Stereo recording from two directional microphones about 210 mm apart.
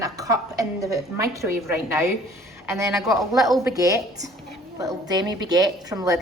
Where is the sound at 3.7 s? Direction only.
15° right (ahead or behind).